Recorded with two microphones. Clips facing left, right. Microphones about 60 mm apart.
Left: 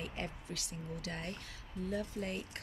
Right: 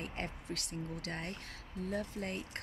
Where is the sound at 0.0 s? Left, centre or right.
Right.